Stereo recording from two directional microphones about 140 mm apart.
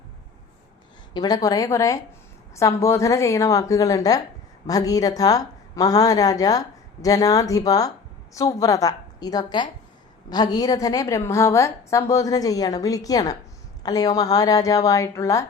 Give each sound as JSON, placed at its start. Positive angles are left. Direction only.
{"t": 1.1, "sound": "a woman's voice", "side_deg": 30}